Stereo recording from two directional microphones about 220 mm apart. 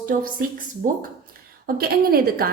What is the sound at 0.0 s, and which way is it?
Speech, 40° right (ahead or behind).